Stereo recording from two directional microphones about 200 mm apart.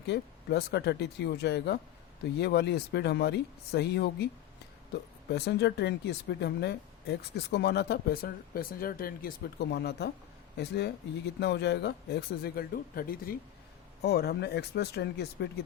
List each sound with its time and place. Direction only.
0.1 s speech: 55° left (ahead or behind)
5.3 s speech: 55° left (ahead or behind)